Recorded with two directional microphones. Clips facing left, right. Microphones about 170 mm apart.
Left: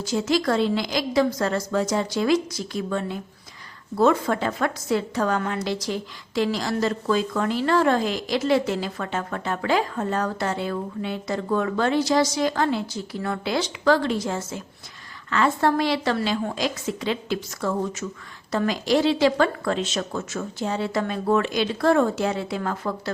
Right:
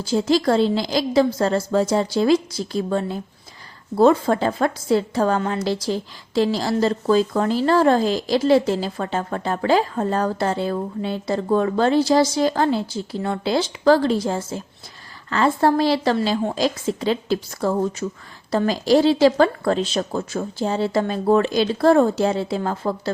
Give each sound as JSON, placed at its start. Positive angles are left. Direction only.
{"t": 0.0, "sound": "a woman's voice", "side_deg": -30}